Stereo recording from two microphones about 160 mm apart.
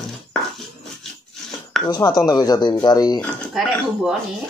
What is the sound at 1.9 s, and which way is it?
Speech, 25° left (ahead or behind).